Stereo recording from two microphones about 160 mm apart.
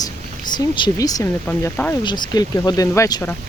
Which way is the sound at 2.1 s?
25° left (ahead or behind).